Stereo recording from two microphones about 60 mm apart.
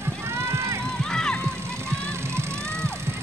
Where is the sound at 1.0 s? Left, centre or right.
Centre.